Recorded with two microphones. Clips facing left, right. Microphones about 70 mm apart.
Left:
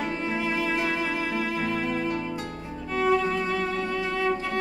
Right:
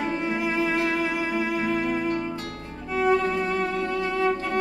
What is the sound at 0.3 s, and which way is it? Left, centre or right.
Music, centre.